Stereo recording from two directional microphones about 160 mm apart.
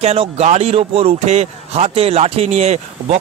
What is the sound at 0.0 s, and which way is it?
Speech, 40° right (ahead or behind).